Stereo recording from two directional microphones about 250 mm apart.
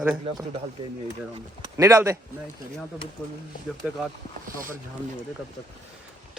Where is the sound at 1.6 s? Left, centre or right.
Centre.